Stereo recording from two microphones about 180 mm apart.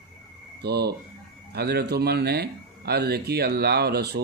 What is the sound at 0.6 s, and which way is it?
Speech, 65° right (ahead or behind).